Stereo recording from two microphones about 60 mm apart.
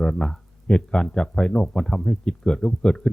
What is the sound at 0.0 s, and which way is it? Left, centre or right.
Speech, centre.